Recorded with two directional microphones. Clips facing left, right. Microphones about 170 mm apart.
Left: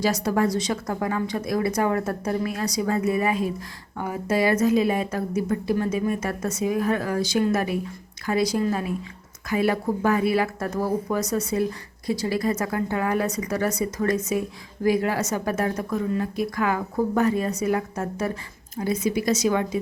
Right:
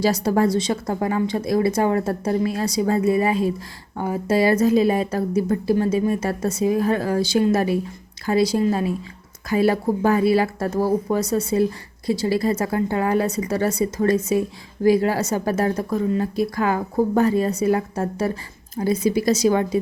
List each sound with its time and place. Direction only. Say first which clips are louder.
0.0 s a woman's voice: right 3 dB; 30° right (ahead or behind)